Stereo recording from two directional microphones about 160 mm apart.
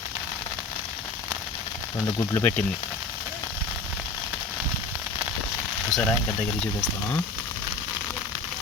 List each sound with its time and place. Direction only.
2.1 s speech: 10° left (ahead or behind)
5.9 s speech: 10° left (ahead or behind)